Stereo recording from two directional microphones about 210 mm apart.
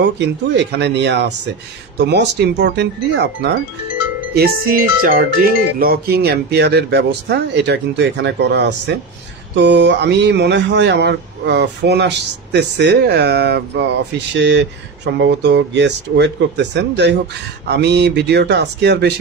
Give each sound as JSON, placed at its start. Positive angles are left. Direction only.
{"t": 0.0, "sound": "speech", "side_deg": -55}
{"t": 5.0, "sound": "speech", "side_deg": -45}